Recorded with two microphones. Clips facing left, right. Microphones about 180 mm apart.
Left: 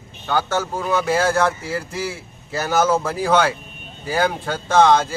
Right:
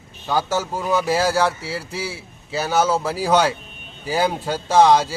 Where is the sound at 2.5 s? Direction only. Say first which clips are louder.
Left 1 dB; 10° right (ahead or behind).